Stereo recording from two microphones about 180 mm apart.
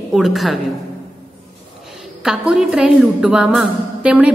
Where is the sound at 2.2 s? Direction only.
5° right (ahead or behind).